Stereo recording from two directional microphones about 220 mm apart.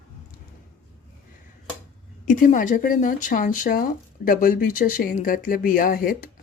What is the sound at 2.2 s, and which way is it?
Speech, 35° left (ahead or behind).